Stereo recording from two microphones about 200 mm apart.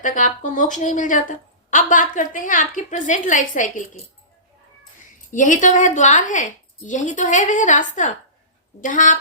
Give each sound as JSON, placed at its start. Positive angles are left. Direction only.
{"t": 0.0, "sound": "a woman's voice", "side_deg": 40}
{"t": 5.3, "sound": "a woman's voice", "side_deg": 40}